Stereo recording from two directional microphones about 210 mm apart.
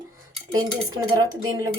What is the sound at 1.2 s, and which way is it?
Speech, 15° right (ahead or behind).